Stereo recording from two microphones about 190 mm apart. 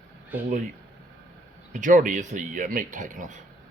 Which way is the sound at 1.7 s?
40° right (ahead or behind).